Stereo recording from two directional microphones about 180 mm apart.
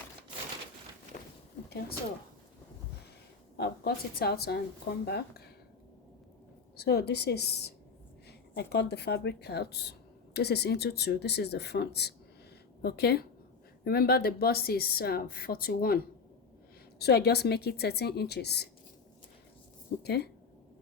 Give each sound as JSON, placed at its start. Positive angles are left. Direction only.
{"t": 3.6, "sound": "speech", "side_deg": 60}
{"t": 6.7, "sound": "speech", "side_deg": 65}
{"t": 17.0, "sound": "speech", "side_deg": 65}
{"t": 20.0, "sound": "speech", "side_deg": 65}